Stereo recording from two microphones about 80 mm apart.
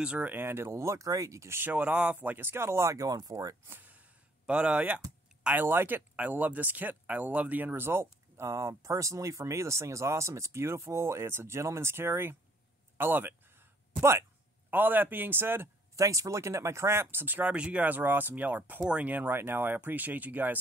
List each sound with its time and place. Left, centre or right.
0.0 s speech: centre
0.3 s speech: right
1.6 s speech: centre; by 3.5 s right
3.6 s a sound: right
4.5 s speech: centre
12.9 s a sound: right
14.7 s speech: right
16.0 s speech: right